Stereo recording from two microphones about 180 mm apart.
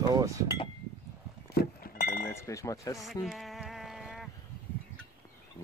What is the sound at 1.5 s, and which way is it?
Chink, 60° left (ahead or behind).